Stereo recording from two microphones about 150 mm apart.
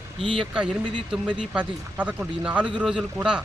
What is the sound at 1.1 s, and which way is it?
A man's voice, 5° right (ahead or behind).